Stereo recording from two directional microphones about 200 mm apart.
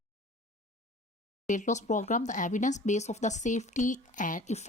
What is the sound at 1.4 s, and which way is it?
Speech, 40° left (ahead or behind).